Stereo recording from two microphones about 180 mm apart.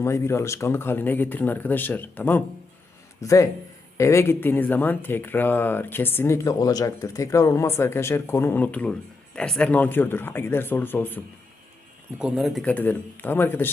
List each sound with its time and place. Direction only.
0.0 s speech: 15° left (ahead or behind)
12.2 s speech: centre (ahead or behind)